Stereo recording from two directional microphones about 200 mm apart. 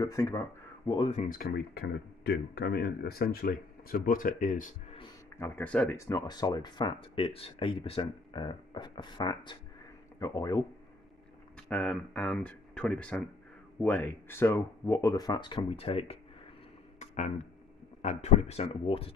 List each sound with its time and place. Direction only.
0.0 s speech: 15° left (ahead or behind); by 4.7 s 40° left (ahead or behind)
5.4 s speech: 5° left (ahead or behind)
11.7 s speech: 5° left (ahead or behind); by 16.2 s 30° left (ahead or behind)
17.0 s a sound: 35° left (ahead or behind)
18.0 s speech: 35° left (ahead or behind)